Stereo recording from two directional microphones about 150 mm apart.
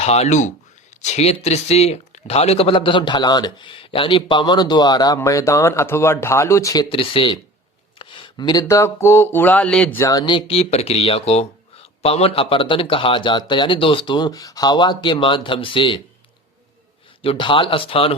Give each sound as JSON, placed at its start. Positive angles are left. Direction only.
{"t": 0.0, "sound": "speech", "side_deg": 45}
{"t": 6.9, "sound": "speech", "side_deg": 35}
{"t": 7.9, "sound": "a sound", "side_deg": 35}
{"t": 10.0, "sound": "speech", "side_deg": 25}
{"t": 17.2, "sound": "speech", "side_deg": 35}